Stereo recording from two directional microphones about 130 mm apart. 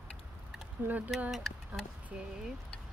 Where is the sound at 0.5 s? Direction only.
10° right (ahead or behind).